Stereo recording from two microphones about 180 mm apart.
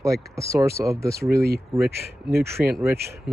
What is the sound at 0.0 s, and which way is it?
Speech, 15° right (ahead or behind).